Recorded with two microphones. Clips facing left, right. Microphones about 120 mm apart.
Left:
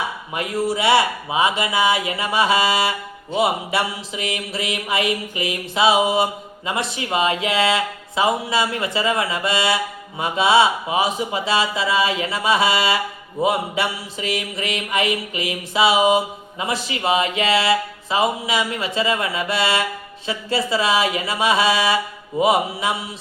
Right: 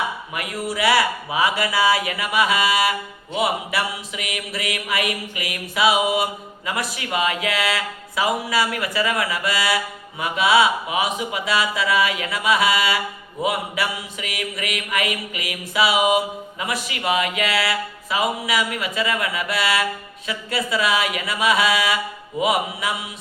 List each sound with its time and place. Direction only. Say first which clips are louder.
0.3 s mantra: left 5 dB; 25° left (ahead or behind)